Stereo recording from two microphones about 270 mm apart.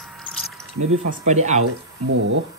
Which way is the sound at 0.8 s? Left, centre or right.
Right.